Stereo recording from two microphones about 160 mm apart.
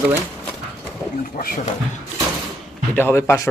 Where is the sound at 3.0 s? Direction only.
15° left (ahead or behind).